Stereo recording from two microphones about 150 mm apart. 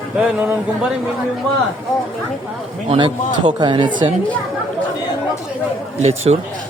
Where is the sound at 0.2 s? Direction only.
5° right (ahead or behind).